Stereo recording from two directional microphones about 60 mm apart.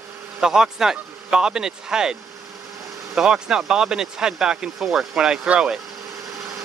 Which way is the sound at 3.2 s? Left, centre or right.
Centre.